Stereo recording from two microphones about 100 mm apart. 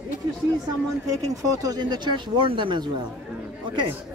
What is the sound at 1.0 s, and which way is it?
Speech, 35° right (ahead or behind).